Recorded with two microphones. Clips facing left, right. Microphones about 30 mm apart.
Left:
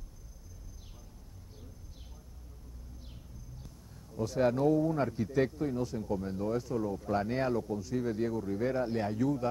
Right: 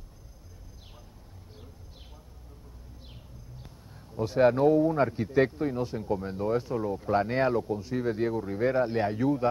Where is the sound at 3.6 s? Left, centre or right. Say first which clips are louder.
Right 3 dB; right.